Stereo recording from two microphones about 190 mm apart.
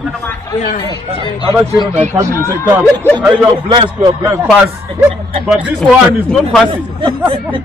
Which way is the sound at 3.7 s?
25° right (ahead or behind).